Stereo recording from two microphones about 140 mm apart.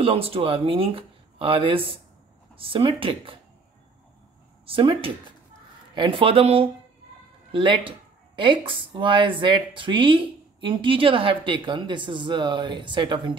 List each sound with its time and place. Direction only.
0.0 s speech: 40° right (ahead or behind)
4.7 s speech: 40° right (ahead or behind)